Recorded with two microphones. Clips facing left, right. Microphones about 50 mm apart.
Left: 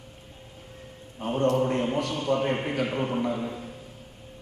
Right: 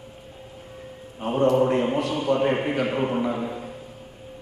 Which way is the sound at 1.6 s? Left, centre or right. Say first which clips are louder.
Right 5 dB; centre.